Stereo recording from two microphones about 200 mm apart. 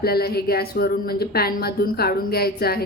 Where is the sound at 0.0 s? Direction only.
50° left (ahead or behind).